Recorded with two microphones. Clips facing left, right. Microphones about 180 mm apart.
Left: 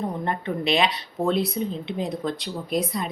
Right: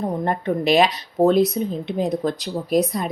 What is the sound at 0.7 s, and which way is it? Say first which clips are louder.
Speech: right 6 dB; 40° right (ahead or behind).